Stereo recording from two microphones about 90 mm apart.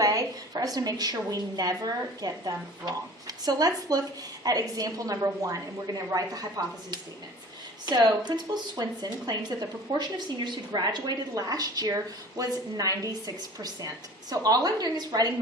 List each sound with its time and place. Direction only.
0.0 s a woman's voice: 40° right (ahead or behind)
7.9 s speech: 55° right (ahead or behind)